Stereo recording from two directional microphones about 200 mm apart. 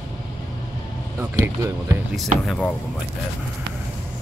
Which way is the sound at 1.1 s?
15° right (ahead or behind).